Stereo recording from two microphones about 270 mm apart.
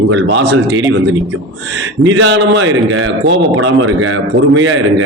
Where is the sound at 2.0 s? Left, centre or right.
Right.